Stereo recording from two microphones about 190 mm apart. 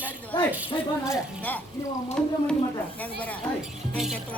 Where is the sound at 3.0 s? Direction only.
10° left (ahead or behind).